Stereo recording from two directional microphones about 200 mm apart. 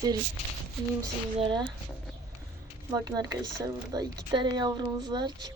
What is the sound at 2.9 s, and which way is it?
Speech, 20° right (ahead or behind).